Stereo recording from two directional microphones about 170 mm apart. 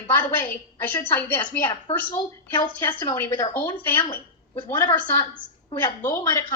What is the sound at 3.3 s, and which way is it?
Speech, 25° left (ahead or behind).